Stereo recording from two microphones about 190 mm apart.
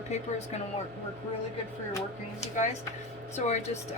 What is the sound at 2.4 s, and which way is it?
A woman's voice, 35° left (ahead or behind).